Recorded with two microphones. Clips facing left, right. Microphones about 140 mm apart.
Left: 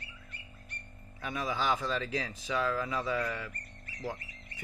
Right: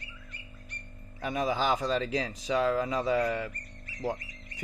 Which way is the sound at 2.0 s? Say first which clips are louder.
Right 4 dB; 20° right (ahead or behind).